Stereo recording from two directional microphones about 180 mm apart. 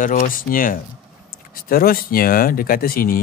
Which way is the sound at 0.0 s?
50° left (ahead or behind).